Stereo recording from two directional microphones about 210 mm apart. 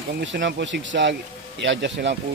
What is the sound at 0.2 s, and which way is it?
Speech, 60° right (ahead or behind).